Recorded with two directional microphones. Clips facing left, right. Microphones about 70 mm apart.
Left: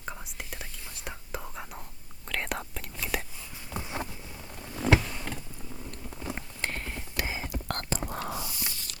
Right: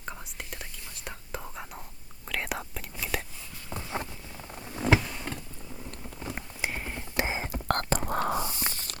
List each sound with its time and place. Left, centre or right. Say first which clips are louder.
0.0 s whispering: even; centre
3.7 s a sound: left 1 dB; right
4.5 s power windows: right 1 dB; centre
4.8 s power windows: even; centre
6.3 s clip-clop: right 2 dB; centre
7.2 s whispering: right 4 dB; right